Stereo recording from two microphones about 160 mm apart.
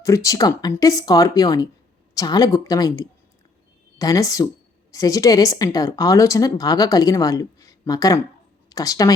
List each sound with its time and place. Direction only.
0.0 s a woman's voice: 20° left (ahead or behind)